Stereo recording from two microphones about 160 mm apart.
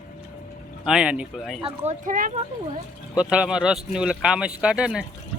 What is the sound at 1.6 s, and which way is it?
Speech, 45° right (ahead or behind).